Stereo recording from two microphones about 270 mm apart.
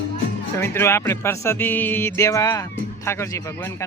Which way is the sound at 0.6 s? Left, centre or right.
Centre.